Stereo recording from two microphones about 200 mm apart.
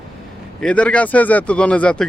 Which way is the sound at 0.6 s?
5° left (ahead or behind).